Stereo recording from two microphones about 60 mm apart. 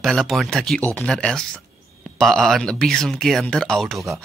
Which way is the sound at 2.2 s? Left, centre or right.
Centre.